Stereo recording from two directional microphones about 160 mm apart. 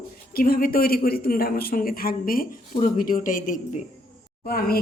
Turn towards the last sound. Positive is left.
turn(degrees=70)  # may be behind; listen again after turning